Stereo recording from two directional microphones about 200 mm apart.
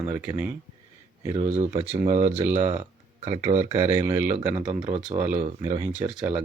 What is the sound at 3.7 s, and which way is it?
Speech, 15° right (ahead or behind).